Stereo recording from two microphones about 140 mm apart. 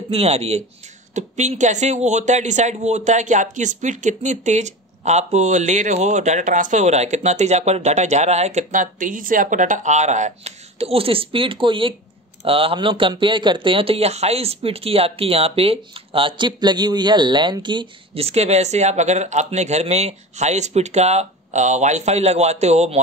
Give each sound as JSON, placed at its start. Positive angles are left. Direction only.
{"t": 0.1, "sound": "a man's voice", "side_deg": -45}